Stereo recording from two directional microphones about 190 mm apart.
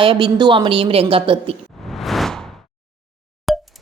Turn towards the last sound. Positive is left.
turn(degrees=0)  # may be behind; listen again after turning